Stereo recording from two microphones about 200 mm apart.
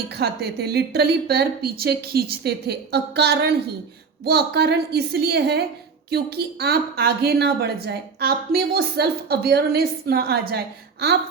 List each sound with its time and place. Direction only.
0.1 s a woman's voice: 55° right (ahead or behind)